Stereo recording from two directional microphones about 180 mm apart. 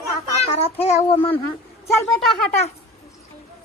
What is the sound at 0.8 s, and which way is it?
Speech, 35° left (ahead or behind).